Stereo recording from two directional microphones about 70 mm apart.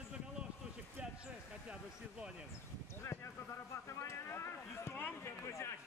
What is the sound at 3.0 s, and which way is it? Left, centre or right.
Speech, left.